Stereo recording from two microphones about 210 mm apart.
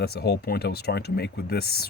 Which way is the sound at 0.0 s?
50° left (ahead or behind).